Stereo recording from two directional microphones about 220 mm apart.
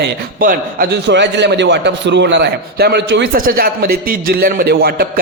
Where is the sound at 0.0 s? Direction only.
40° right (ahead or behind).